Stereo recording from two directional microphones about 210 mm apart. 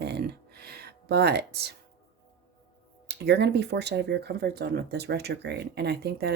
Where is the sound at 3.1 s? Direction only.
55° right (ahead or behind).